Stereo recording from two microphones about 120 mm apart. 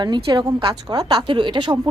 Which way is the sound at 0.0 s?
40° right (ahead or behind).